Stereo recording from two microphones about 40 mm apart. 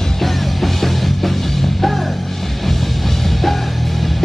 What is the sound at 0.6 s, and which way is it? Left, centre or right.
Music, centre.